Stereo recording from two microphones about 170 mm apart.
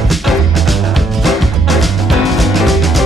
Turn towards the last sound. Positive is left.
turn(degrees=0)  # may be behind; listen again after turning